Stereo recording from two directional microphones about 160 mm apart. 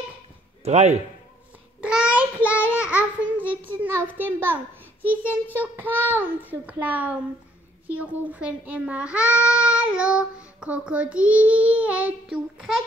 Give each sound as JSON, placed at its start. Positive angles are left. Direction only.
{"t": 0.7, "sound": "a man's voice", "side_deg": -45}
{"t": 1.8, "sound": "a sound", "side_deg": -5}
{"t": 3.2, "sound": "a child's voice", "side_deg": -10}